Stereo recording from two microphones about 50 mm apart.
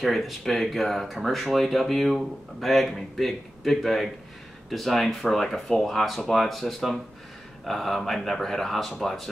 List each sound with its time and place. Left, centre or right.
0.0 s speech: centre